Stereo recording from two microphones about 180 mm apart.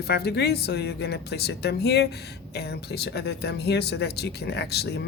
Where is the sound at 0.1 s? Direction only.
65° left (ahead or behind).